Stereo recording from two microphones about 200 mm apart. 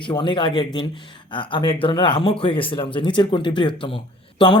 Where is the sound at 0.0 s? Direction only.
25° left (ahead or behind).